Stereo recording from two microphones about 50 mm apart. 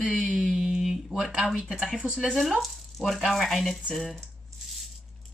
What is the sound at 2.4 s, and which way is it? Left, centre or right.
Speech, centre.